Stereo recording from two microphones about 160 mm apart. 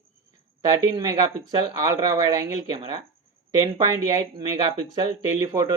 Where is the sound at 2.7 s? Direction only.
35° right (ahead or behind).